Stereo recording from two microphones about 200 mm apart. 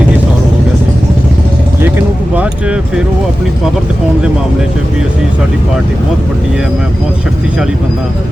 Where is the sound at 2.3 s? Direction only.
5° right (ahead or behind).